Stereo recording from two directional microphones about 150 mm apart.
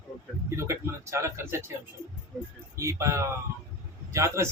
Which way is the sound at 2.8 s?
20° right (ahead or behind).